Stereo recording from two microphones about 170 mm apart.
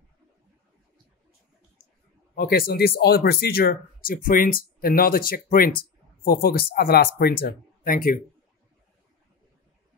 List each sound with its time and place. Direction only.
2.3 s speech: 65° left (ahead or behind)